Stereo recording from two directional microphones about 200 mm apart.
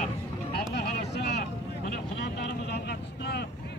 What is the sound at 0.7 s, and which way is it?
Vehicle, 50° left (ahead or behind).